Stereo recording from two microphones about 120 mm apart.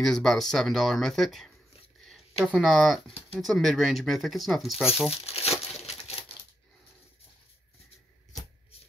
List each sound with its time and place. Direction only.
0.0 s speech: centre (ahead or behind)
5.3 s crumpling: 60° left (ahead or behind)